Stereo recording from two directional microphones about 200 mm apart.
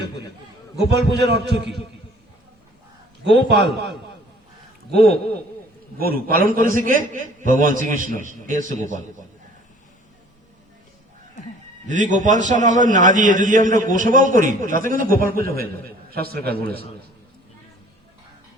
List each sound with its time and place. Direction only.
0.8 s a man's voice: 55° right (ahead or behind)
3.2 s a man's voice: 55° right (ahead or behind)
4.9 s a man's voice: 55° right (ahead or behind)
11.9 s a man's voice: 40° right (ahead or behind)